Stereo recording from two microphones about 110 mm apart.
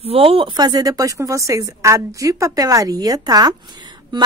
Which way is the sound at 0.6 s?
35° right (ahead or behind).